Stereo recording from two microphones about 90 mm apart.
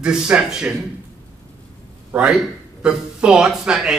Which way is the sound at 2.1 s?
10° right (ahead or behind).